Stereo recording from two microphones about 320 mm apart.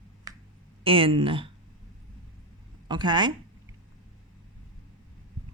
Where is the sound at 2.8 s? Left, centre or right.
Centre.